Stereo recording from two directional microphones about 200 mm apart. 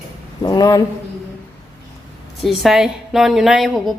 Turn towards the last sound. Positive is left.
turn(degrees=0)  # may be behind; listen again after turning